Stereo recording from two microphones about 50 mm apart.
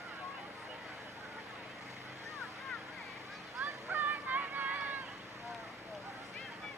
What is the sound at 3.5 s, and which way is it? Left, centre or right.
Vehicle, right.